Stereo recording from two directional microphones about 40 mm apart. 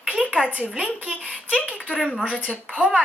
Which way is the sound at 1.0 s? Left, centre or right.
Right.